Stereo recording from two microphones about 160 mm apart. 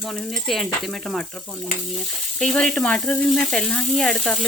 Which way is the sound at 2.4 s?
5° left (ahead or behind).